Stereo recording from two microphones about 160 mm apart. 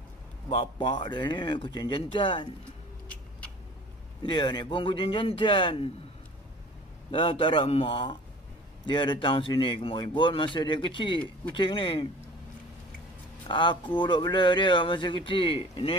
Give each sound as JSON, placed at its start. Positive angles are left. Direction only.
{"t": 0.5, "sound": "speech", "side_deg": 30}
{"t": 4.2, "sound": "speech", "side_deg": 30}
{"t": 7.1, "sound": "speech", "side_deg": 35}
{"t": 13.5, "sound": "speech", "side_deg": 30}